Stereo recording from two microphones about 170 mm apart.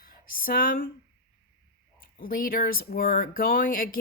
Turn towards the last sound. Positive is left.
turn(degrees=55)  # may be behind; listen again after turning